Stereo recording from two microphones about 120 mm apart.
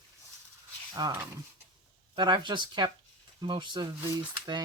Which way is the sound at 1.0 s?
35° right (ahead or behind).